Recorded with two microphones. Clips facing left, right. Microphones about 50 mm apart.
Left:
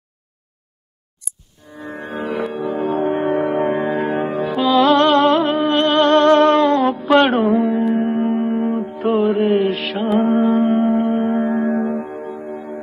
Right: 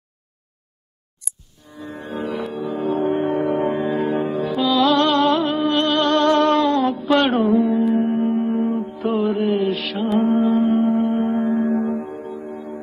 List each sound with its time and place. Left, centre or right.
1.7 s music: left
7.5 s music: centre
8.7 s music: left
10.0 s music: centre
10.4 s music: left
10.8 s music: centre
11.7 s music: left